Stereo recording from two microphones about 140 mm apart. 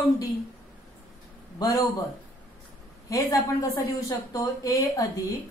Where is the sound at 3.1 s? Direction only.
20° left (ahead or behind).